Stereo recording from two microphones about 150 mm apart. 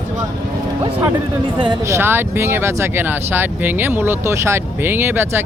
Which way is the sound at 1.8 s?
15° right (ahead or behind).